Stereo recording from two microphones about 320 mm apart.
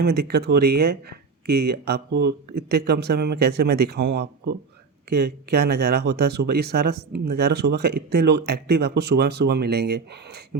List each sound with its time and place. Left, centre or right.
0.0 s speech: right